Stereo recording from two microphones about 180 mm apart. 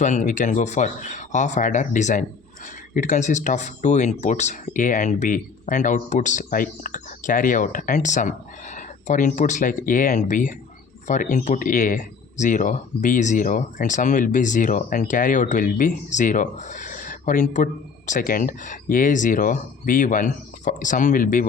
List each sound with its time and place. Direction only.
0.0 s speech: 45° left (ahead or behind)